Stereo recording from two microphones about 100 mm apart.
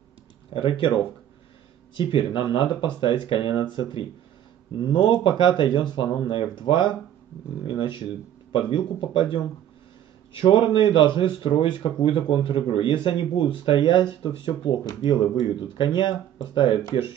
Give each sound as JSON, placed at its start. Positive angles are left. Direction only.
{"t": 0.5, "sound": "speech", "side_deg": 65}
{"t": 16.9, "sound": "speech", "side_deg": 70}